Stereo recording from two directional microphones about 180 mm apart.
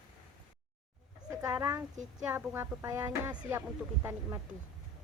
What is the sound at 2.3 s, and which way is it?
Speech, 10° right (ahead or behind).